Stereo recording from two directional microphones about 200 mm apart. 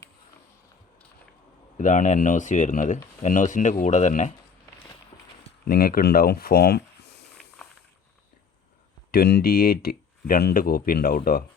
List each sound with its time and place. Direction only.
1.8 s speech: 40° left (ahead or behind)
5.6 s speech: 45° left (ahead or behind)
7.3 s walk: 5° left (ahead or behind)
9.1 s speech: 50° left (ahead or behind)